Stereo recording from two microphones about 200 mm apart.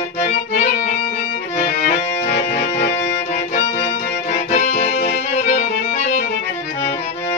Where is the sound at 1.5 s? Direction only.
50° left (ahead or behind).